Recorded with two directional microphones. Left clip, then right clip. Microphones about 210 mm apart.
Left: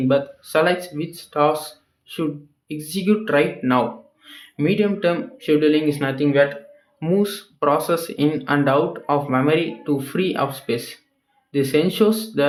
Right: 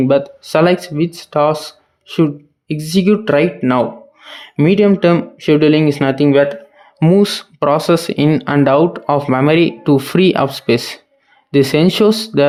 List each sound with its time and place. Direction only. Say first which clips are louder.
0.1 s speech: right 6 dB; 50° right (ahead or behind)